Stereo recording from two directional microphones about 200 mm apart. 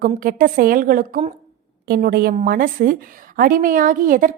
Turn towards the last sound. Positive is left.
turn(degrees=-45)  # may be behind; listen again after turning